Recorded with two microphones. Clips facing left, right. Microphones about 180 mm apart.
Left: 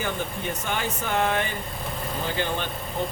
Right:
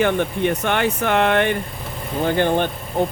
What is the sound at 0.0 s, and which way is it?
Speech, 70° right (ahead or behind).